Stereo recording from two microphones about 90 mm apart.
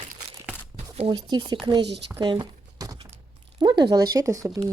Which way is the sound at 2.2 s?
50° right (ahead or behind).